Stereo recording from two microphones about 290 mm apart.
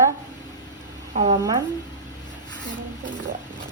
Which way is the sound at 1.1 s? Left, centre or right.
Right.